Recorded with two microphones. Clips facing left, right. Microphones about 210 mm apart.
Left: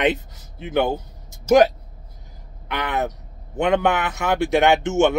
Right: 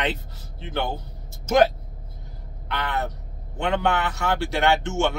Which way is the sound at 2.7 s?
15° left (ahead or behind).